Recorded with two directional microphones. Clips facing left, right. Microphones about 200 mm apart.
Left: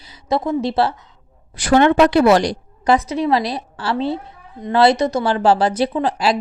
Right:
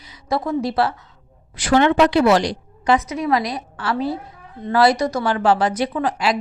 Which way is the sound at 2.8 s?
30° left (ahead or behind).